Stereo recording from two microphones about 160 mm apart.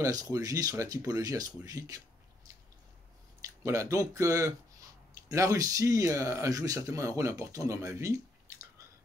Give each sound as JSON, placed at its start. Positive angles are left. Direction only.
{"t": 0.0, "sound": "speech", "side_deg": -20}
{"t": 3.3, "sound": "speech", "side_deg": -20}